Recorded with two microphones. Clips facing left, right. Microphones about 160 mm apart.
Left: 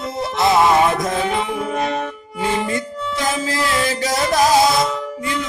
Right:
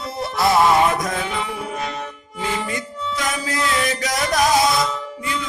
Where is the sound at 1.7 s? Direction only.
55° left (ahead or behind).